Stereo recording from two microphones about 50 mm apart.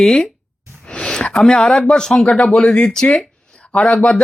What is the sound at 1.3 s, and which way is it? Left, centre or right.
Speech, centre.